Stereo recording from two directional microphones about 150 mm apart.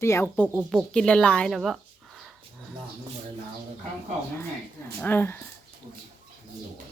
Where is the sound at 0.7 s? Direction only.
5° left (ahead or behind).